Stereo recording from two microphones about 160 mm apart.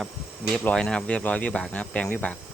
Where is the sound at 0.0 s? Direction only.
Centre (ahead or behind).